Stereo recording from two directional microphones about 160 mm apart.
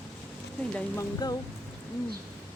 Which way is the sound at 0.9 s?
25° left (ahead or behind).